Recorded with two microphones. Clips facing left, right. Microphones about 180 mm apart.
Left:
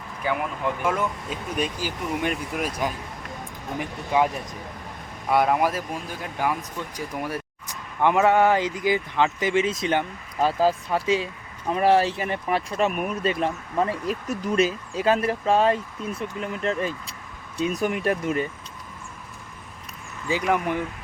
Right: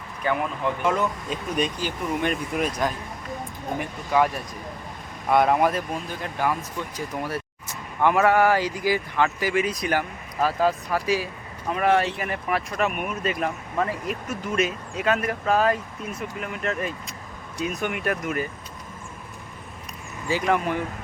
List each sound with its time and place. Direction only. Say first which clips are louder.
0.2 s speech: right 1 dB; 10° left (ahead or behind)
1.5 s speech: right 1 dB; 10° left (ahead or behind)
5.3 s speech: right 1 dB; 5° left (ahead or behind); by 18.4 s 30° left (ahead or behind)
20.2 s speech: even; 15° left (ahead or behind)